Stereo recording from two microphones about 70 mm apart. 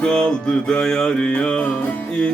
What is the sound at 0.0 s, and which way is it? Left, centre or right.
Music, centre.